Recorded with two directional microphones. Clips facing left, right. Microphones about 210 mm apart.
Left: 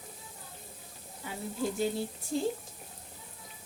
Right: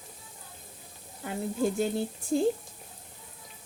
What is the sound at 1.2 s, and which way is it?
Speech, 50° right (ahead or behind).